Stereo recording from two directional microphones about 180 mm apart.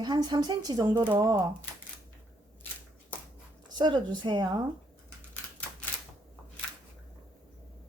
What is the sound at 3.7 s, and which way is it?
Speech, 25° right (ahead or behind).